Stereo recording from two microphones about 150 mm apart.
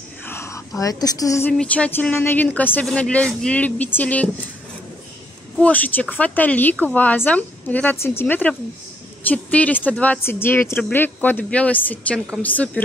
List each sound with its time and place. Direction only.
0.2 s a sound: 15° left (ahead or behind)
1.5 s speech: 5° left (ahead or behind)
5.6 s speech: 10° left (ahead or behind)